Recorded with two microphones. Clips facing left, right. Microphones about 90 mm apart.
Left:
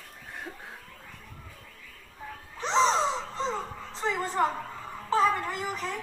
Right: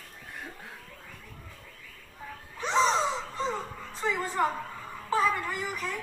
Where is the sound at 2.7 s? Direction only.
Centre (ahead or behind).